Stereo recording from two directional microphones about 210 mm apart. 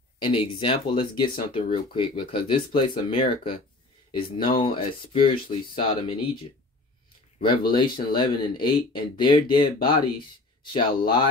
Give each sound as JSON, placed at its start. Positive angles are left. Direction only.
{"t": 0.2, "sound": "speech", "side_deg": 25}
{"t": 7.7, "sound": "speech", "side_deg": 20}